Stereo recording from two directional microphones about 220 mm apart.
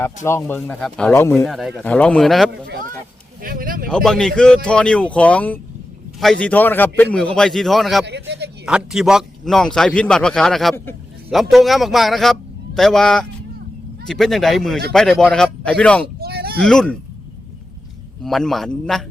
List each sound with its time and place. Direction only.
0.0 s speech: 10° left (ahead or behind)
1.5 s a man's voice: centre (ahead or behind)
3.4 s a sound: 40° right (ahead or behind)
3.8 s a man's voice: centre (ahead or behind)
8.0 s speech: 50° right (ahead or behind)
8.6 s a man's voice: 5° right (ahead or behind)
16.2 s a sound: 45° right (ahead or behind)
16.6 s a man's voice: 5° left (ahead or behind)
18.2 s a man's voice: centre (ahead or behind)